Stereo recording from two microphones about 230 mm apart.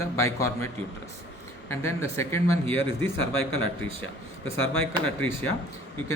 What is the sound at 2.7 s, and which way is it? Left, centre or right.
Speech, left.